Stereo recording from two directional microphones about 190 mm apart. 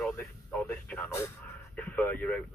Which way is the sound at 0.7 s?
10° left (ahead or behind).